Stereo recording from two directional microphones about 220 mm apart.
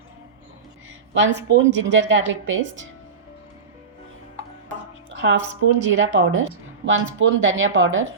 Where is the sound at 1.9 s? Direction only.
55° right (ahead or behind).